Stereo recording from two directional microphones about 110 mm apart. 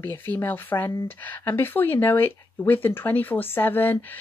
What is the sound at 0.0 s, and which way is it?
Speech, 20° left (ahead or behind).